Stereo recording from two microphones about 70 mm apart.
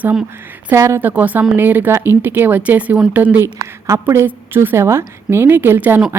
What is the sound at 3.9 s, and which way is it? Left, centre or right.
A woman's voice, right.